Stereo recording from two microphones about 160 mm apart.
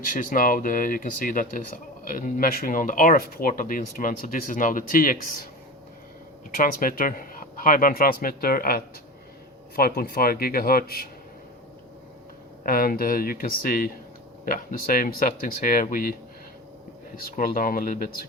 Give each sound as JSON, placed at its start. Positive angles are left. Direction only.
{"t": 0.0, "sound": "speech", "side_deg": 55}
{"t": 6.5, "sound": "speech", "side_deg": 60}
{"t": 12.6, "sound": "speech", "side_deg": 65}
{"t": 17.2, "sound": "speech", "side_deg": 65}